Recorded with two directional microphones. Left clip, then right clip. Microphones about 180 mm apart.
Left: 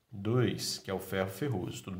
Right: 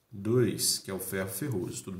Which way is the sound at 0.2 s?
40° left (ahead or behind).